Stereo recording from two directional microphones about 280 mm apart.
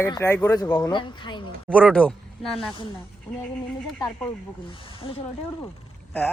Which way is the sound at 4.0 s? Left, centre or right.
Centre.